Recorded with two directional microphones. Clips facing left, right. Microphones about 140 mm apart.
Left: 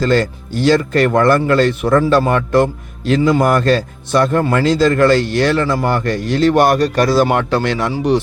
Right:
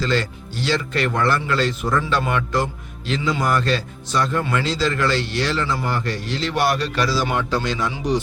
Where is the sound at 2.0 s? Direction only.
40° left (ahead or behind).